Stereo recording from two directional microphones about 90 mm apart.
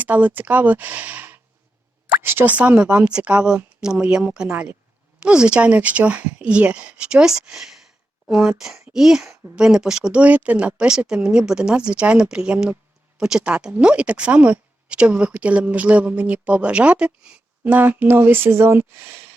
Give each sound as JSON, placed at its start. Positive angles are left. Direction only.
{"t": 0.0, "sound": "a woman's voice", "side_deg": -20}